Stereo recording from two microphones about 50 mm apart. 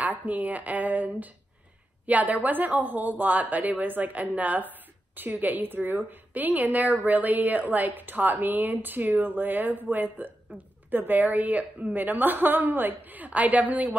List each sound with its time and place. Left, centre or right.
0.0 s a woman's voice: right